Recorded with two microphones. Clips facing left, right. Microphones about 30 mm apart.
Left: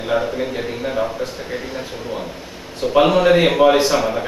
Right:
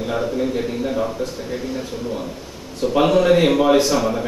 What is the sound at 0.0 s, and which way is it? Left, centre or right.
A man's voice, left.